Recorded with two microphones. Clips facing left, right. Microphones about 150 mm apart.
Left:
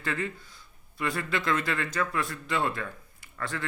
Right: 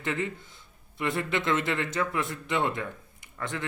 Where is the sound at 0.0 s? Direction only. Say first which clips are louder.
Right 2 dB; 20° right (ahead or behind).